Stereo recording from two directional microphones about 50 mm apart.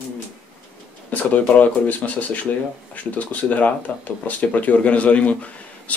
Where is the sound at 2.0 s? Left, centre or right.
Left.